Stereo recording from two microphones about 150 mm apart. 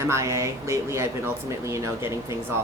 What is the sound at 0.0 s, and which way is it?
Speech, 20° right (ahead or behind).